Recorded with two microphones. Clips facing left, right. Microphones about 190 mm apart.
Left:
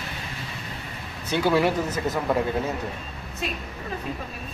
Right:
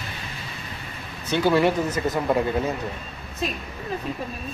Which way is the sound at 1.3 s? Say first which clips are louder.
Right 2 dB; 10° left (ahead or behind).